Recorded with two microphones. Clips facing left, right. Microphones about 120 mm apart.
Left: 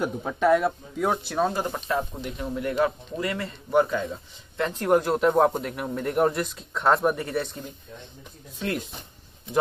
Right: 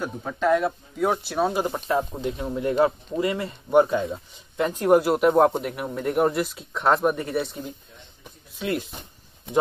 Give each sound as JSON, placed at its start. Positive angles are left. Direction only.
{"t": 0.2, "sound": "speech", "side_deg": 10}